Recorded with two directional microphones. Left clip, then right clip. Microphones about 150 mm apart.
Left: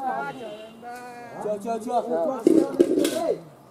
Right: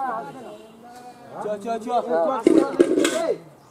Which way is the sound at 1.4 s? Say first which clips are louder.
Right 1 dB; centre (ahead or behind).